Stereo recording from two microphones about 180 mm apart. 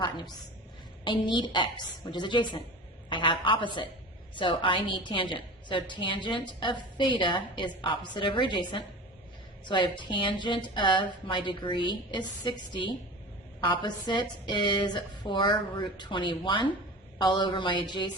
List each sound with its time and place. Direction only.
1.0 s a woman's voice: 25° left (ahead or behind)